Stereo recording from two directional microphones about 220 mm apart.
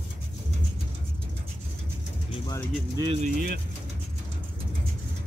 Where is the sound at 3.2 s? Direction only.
45° right (ahead or behind).